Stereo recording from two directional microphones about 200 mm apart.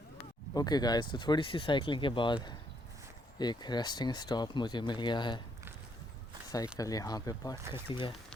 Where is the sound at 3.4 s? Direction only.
20° left (ahead or behind).